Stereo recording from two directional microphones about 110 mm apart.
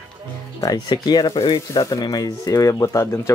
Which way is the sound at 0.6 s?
40° left (ahead or behind).